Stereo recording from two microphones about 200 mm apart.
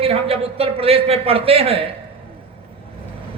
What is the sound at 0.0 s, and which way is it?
A man's voice, 30° right (ahead or behind).